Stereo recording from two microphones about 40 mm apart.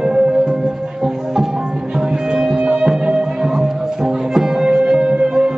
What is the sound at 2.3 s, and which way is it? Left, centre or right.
Music, centre.